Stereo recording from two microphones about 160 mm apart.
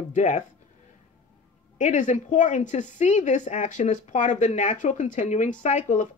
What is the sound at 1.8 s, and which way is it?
A woman's voice, 50° left (ahead or behind).